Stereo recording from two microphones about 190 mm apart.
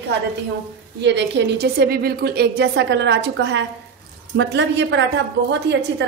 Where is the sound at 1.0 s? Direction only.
70° right (ahead or behind).